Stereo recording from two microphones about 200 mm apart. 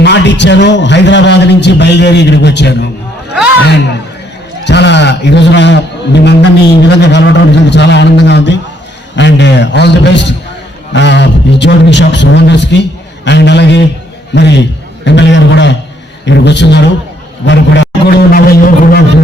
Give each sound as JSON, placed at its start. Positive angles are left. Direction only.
{"t": 0.0, "sound": "speech", "side_deg": 60}
{"t": 4.6, "sound": "a man's voice", "side_deg": 60}
{"t": 17.4, "sound": "a sound", "side_deg": 60}